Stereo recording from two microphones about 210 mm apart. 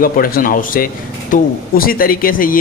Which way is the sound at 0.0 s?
45° left (ahead or behind).